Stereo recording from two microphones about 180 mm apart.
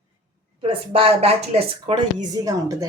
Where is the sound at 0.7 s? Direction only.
30° right (ahead or behind).